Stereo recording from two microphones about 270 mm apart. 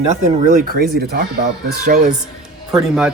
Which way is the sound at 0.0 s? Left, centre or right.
Right.